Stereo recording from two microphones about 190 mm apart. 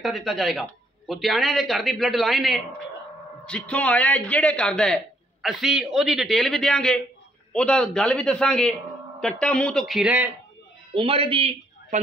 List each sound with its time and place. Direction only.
0.0 s a man's voice: centre (ahead or behind)
11.0 s a man's voice: 30° right (ahead or behind)